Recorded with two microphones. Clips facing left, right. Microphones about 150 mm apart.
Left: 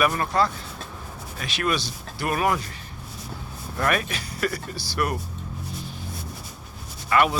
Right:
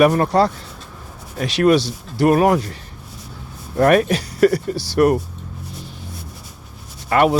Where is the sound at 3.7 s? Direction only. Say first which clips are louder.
Right 11 dB; 40° right (ahead or behind).